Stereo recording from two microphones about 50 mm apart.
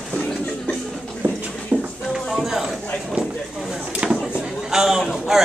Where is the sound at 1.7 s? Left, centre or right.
Right.